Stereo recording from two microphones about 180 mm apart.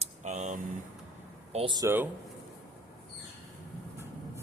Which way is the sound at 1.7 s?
15° right (ahead or behind).